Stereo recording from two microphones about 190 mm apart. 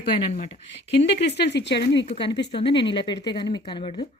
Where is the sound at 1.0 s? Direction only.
60° left (ahead or behind).